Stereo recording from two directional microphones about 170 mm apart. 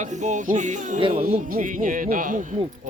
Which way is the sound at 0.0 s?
45° right (ahead or behind).